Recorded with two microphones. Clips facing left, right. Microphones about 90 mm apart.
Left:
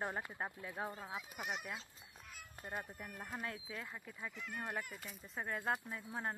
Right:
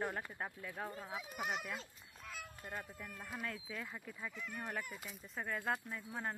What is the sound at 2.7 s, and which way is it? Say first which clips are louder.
Speech: left 2 dB; 15° left (ahead or behind).